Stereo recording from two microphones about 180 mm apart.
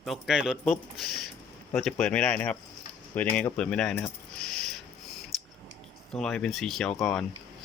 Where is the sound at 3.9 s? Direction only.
5° left (ahead or behind).